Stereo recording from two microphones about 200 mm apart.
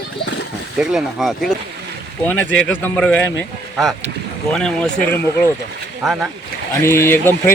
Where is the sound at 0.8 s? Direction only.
5° right (ahead or behind).